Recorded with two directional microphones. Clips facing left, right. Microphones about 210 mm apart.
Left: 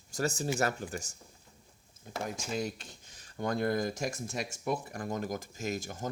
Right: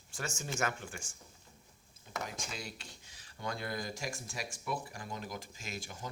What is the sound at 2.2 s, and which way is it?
Speech, 50° left (ahead or behind).